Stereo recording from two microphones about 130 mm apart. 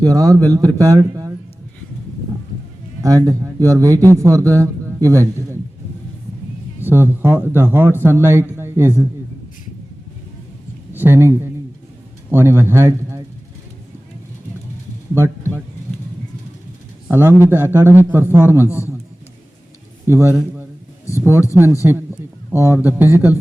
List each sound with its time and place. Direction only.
0.0 s a man's voice: 25° right (ahead or behind)
3.2 s a man's voice: 25° right (ahead or behind)
6.8 s a man's voice: 15° right (ahead or behind)
10.9 s a man's voice: 20° right (ahead or behind)
15.1 s speech: 20° right (ahead or behind)
17.1 s a man's voice: 20° right (ahead or behind)
20.1 s a man's voice: 20° right (ahead or behind)